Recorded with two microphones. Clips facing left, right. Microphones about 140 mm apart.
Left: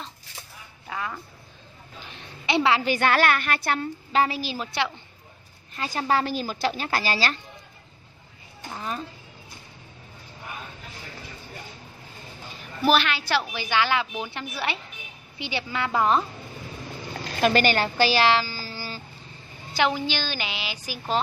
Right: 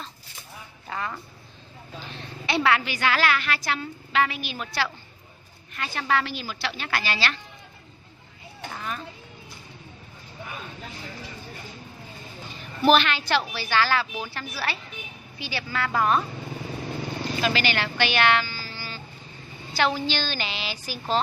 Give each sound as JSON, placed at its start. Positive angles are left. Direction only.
{"t": 0.8, "sound": "music", "side_deg": 5}
{"t": 2.1, "sound": "a sound", "side_deg": 20}
{"t": 2.8, "sound": "a woman's voice", "side_deg": 50}
{"t": 5.8, "sound": "a woman's voice", "side_deg": 35}
{"t": 12.8, "sound": "a woman's voice", "side_deg": 5}
{"t": 17.4, "sound": "speech", "side_deg": 50}
{"t": 19.7, "sound": "speech", "side_deg": 15}